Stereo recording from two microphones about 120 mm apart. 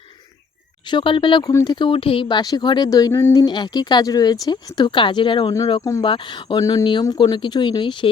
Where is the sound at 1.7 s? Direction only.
45° left (ahead or behind); by 3.4 s 25° left (ahead or behind).